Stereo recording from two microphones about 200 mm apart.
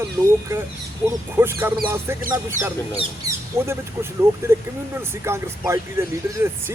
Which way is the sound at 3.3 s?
15° right (ahead or behind).